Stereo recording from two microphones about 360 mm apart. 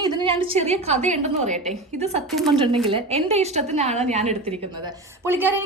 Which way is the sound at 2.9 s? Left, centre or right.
Centre.